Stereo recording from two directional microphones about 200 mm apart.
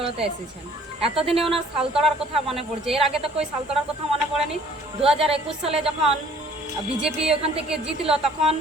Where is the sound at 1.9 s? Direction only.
Centre (ahead or behind).